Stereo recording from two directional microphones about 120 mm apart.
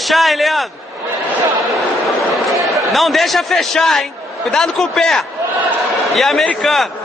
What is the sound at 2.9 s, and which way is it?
A man's voice, centre (ahead or behind).